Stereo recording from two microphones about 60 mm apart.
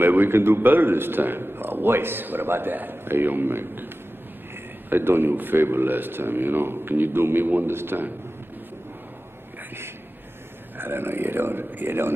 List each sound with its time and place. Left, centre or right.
0.0 s a man's voice: right
10.8 s a man's voice: right